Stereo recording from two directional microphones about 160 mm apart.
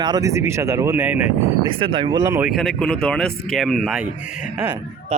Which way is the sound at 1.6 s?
35° right (ahead or behind).